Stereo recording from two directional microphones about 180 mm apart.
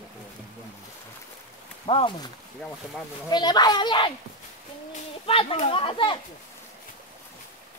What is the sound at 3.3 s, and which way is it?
A child's voice, 25° left (ahead or behind).